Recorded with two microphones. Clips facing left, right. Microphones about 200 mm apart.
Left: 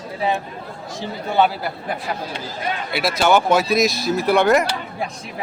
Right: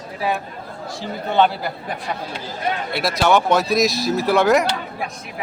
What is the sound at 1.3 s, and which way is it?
Speech, 5° left (ahead or behind).